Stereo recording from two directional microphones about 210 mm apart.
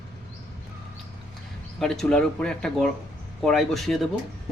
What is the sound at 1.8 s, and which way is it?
A man's voice, centre (ahead or behind).